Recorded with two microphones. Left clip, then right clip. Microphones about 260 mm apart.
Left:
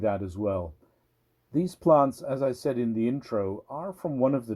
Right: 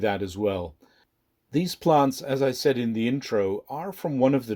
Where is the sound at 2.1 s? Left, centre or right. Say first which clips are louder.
Right 3 dB; right.